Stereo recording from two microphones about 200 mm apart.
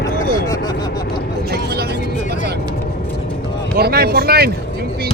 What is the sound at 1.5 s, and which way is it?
Vehicle, 50° right (ahead or behind).